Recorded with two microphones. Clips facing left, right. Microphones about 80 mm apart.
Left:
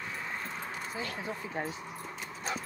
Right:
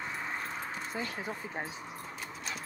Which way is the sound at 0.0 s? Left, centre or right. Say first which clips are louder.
Right 1 dB; centre.